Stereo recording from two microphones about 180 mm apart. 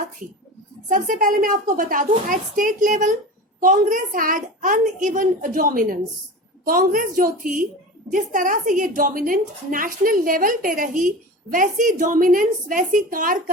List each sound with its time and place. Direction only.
0.9 s a woman's voice: 45° right (ahead or behind)